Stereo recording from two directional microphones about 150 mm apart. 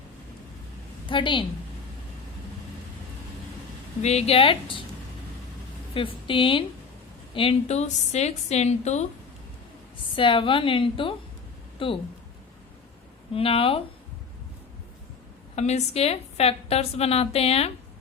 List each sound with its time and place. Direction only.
1.0 s a woman's voice: 35° left (ahead or behind)
4.0 s a woman's voice: 40° left (ahead or behind)
5.9 s a woman's voice: 35° left (ahead or behind)
10.2 s a woman's voice: 35° left (ahead or behind)
13.3 s a woman's voice: 40° left (ahead or behind)
15.5 s a woman's voice: 45° left (ahead or behind)